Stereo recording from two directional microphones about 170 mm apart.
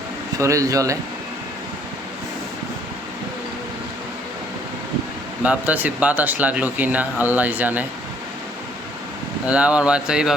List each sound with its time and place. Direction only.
0.3 s a man's voice: 20° right (ahead or behind)
5.4 s speech: 10° right (ahead or behind)
9.5 s speech: 5° right (ahead or behind)